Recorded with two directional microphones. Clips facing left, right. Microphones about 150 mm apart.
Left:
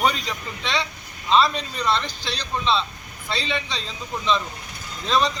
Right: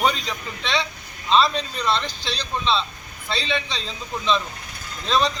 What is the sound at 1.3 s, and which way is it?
Speech, 10° left (ahead or behind).